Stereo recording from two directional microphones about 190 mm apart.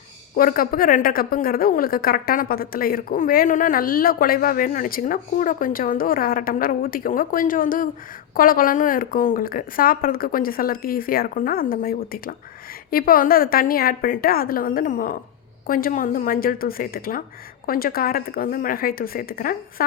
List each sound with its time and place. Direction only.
0.3 s a woman's voice: 50° left (ahead or behind)